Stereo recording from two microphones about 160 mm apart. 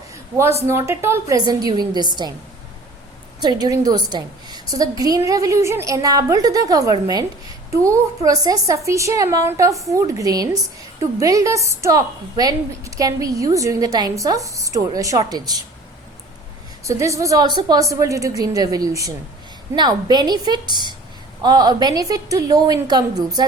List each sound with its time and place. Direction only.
0.7 s a woman's voice: 15° right (ahead or behind)
3.4 s a woman's voice: 25° right (ahead or behind)
16.8 s a woman's voice: 20° right (ahead or behind)